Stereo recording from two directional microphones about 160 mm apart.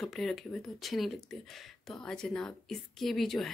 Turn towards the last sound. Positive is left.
turn(degrees=0)  # may be behind; listen again after turning